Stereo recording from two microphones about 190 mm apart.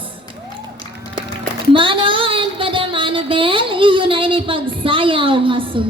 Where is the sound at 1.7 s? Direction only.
25° right (ahead or behind).